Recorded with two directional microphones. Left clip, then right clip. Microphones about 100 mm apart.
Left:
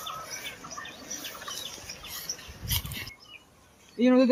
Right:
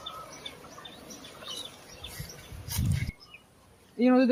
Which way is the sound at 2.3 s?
60° right (ahead or behind).